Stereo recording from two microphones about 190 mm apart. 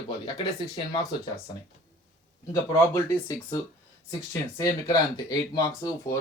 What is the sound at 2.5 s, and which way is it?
Speech, 15° left (ahead or behind).